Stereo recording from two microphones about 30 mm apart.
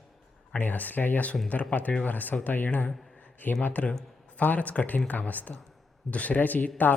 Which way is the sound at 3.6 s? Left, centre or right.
Left.